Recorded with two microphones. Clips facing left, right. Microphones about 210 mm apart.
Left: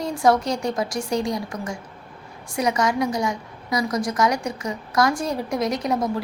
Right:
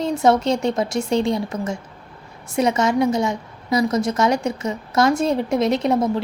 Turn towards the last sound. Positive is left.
turn(degrees=-25)  # may be behind; listen again after turning